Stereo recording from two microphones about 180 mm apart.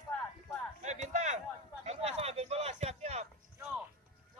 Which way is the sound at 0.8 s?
40° right (ahead or behind).